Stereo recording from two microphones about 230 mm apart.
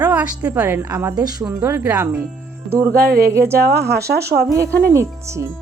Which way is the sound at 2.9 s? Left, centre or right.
Right.